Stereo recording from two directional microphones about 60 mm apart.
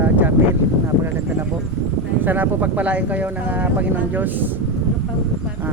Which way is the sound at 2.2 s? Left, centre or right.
Right.